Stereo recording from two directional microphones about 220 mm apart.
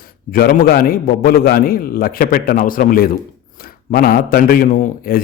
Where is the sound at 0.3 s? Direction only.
40° left (ahead or behind).